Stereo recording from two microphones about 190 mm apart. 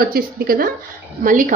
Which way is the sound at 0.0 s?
50° right (ahead or behind).